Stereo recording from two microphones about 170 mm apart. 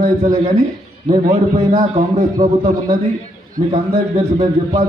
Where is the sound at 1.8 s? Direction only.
40° right (ahead or behind).